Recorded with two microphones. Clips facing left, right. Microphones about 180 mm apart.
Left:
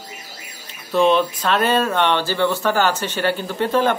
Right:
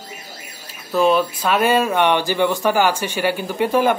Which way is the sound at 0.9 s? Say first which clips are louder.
Even; 5° right (ahead or behind).